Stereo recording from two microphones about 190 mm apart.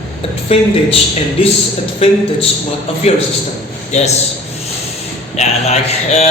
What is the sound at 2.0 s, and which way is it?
A man's voice, 30° left (ahead or behind).